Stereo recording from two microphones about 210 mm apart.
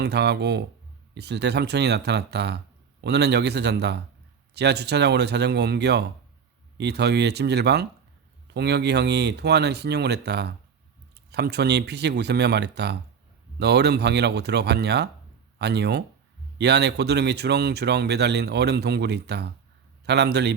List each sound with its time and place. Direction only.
0.0 s speech: 50° right (ahead or behind)